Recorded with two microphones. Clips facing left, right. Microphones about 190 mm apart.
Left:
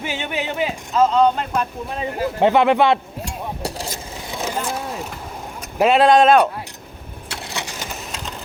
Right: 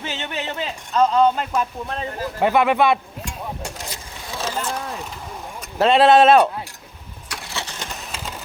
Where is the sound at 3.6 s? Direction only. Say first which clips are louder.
Left 5 dB; 35° left (ahead or behind).